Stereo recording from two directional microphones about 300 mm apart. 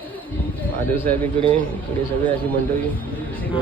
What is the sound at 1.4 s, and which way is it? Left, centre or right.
Speech, centre.